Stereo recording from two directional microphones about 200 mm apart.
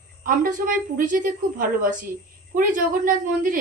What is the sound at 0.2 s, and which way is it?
Speech, 45° right (ahead or behind).